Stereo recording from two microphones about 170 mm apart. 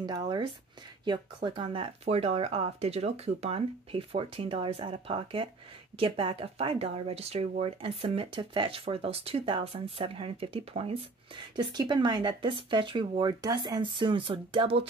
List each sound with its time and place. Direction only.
0.0 s speech: 25° right (ahead or behind)